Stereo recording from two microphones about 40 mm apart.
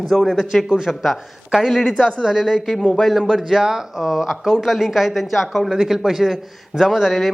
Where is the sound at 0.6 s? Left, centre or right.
Centre.